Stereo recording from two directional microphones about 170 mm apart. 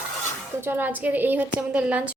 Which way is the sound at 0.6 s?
10° right (ahead or behind).